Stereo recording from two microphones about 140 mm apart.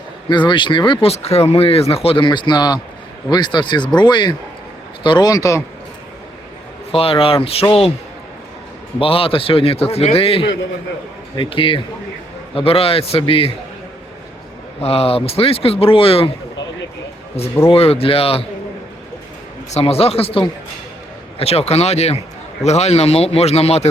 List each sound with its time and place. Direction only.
0.3 s a man's voice: 35° left (ahead or behind)
6.9 s speech: 40° left (ahead or behind)
9.0 s a man's voice: 40° left (ahead or behind)
14.8 s a man's voice: 45° left (ahead or behind)
17.7 s a man's voice: 45° left (ahead or behind)
19.7 s a man's voice: 45° left (ahead or behind)